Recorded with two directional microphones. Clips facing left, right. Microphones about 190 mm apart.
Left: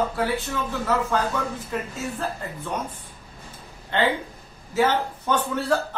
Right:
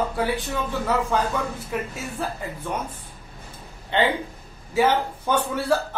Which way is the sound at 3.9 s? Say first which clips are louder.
Right 1 dB; 15° right (ahead or behind).